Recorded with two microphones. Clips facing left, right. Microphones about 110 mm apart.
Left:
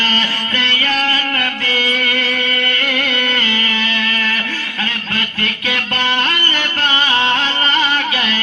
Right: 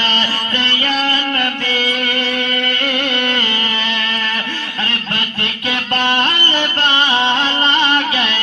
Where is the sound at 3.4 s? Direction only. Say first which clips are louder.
Left 1 dB; 35° right (ahead or behind).